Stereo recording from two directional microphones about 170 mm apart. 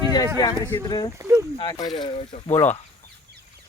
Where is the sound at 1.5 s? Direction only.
25° left (ahead or behind).